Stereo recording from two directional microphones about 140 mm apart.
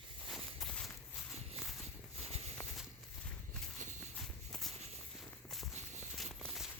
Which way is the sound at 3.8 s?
60° right (ahead or behind).